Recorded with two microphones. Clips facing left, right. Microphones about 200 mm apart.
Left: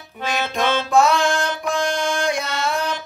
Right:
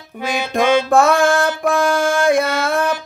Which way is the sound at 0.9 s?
55° right (ahead or behind).